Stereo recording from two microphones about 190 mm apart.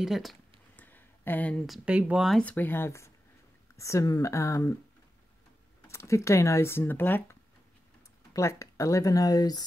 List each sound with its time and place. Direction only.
0.0 s speech: centre (ahead or behind); by 4.7 s 15° left (ahead or behind)
5.9 s speech: 15° left (ahead or behind)